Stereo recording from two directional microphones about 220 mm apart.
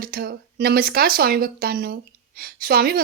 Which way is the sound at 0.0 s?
45° right (ahead or behind).